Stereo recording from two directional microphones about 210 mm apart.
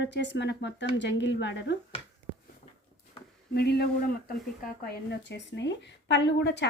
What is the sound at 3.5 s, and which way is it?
Speech, 50° left (ahead or behind).